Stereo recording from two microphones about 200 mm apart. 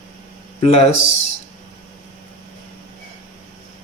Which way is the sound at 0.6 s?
30° left (ahead or behind).